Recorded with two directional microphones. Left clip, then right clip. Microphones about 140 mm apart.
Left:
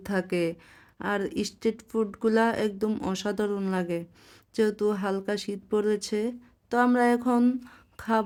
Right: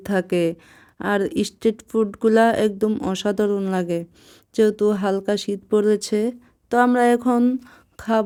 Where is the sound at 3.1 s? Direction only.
30° right (ahead or behind).